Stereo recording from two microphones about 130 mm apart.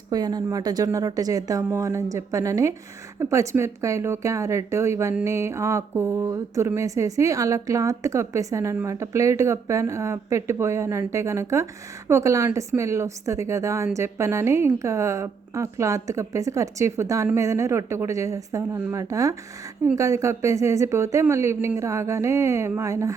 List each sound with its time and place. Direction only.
0.1 s speech: 30° right (ahead or behind)